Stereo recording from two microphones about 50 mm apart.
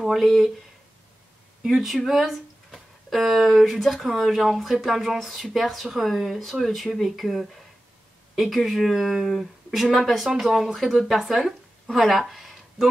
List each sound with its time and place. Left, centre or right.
0.0 s speech: centre
1.6 s speech: centre